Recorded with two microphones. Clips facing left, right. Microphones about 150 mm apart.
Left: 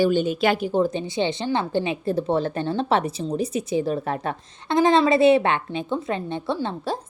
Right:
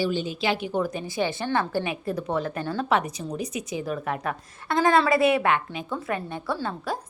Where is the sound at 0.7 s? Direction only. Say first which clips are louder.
Left 5 dB; 25° left (ahead or behind).